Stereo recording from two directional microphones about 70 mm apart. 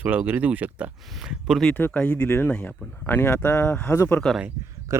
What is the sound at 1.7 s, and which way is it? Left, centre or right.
Speech, left.